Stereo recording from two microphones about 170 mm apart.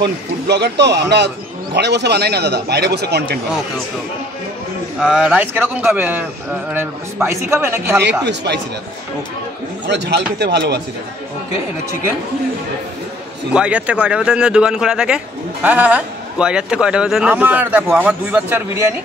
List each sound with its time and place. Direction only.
0.0 s speech: 80° right
5.0 s a man's voice: 5° right (ahead or behind)
8.0 s speech: 90° right
9.8 s a man's voice: 85° right
13.5 s a man's voice: 5° right (ahead or behind)